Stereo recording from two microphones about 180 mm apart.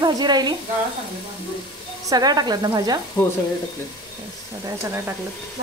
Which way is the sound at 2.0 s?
20° right (ahead or behind).